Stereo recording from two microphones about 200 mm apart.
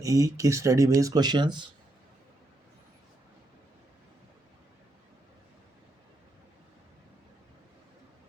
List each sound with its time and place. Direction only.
0.0 s speech: 15° right (ahead or behind)